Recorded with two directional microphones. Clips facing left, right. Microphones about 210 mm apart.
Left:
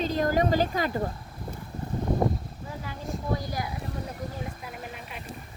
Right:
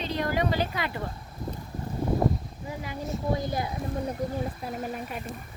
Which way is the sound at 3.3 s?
20° right (ahead or behind).